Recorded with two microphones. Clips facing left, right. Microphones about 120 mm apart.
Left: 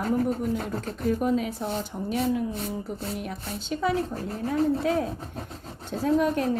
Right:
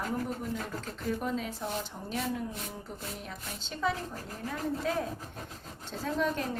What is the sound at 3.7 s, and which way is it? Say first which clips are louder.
Speech: left 6 dB; 5° left (ahead or behind).